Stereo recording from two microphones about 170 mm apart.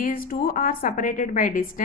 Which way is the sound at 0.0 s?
60° left (ahead or behind).